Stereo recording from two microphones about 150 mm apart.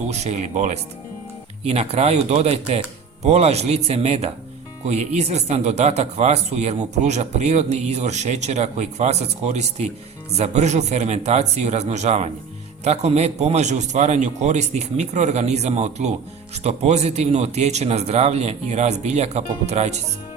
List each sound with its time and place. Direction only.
0.1 s speech: 50° right (ahead or behind)